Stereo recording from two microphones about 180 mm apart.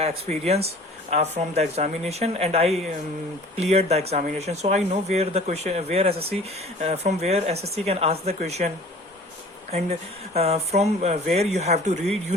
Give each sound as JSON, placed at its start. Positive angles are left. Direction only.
{"t": 0.0, "sound": "speech", "side_deg": -35}
{"t": 9.7, "sound": "speech", "side_deg": -35}